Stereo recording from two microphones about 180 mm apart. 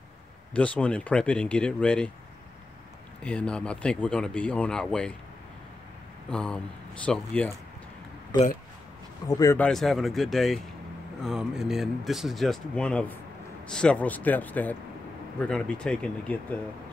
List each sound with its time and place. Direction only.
0.6 s speech: 5° left (ahead or behind)
3.2 s speech: 5° left (ahead or behind)
6.3 s speech: 5° left (ahead or behind)
9.3 s speech: 20° left (ahead or behind)
9.6 s speech: centre (ahead or behind)